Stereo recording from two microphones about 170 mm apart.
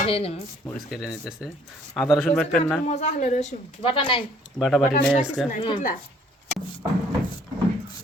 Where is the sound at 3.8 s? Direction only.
30° left (ahead or behind).